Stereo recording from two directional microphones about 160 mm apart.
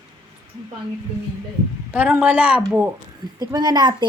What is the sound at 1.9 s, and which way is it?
Speech, 10° right (ahead or behind).